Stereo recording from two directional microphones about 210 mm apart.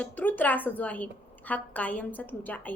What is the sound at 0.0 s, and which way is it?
A woman's voice, 10° left (ahead or behind).